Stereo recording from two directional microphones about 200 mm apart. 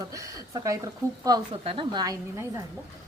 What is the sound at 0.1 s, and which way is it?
Speech, 15° right (ahead or behind).